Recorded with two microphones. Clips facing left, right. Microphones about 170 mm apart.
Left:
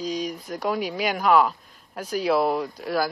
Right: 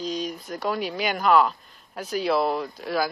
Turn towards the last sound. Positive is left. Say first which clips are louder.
# left 1 dB
turn(degrees=0)  # may be behind; listen again after turning